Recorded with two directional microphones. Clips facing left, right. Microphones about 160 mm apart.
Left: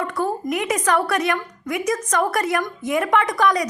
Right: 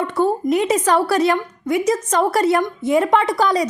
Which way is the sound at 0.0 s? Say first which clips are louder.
Right 5 dB; 25° right (ahead or behind).